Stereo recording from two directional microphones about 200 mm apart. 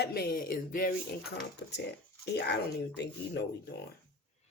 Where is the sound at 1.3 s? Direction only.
55° left (ahead or behind).